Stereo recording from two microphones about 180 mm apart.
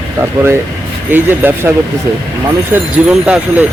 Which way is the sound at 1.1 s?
10° right (ahead or behind).